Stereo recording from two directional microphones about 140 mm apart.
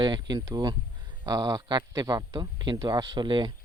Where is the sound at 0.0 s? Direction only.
30° right (ahead or behind).